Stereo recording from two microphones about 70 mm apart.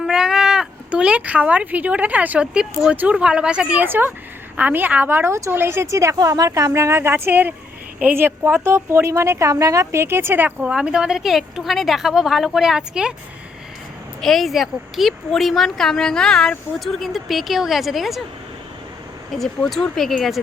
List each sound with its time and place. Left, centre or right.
0.0 s a woman's voice: centre
3.8 s speech: right
6.1 s a woman's voice: right
10.7 s a woman's voice: centre
14.2 s speech: centre
19.3 s speech: centre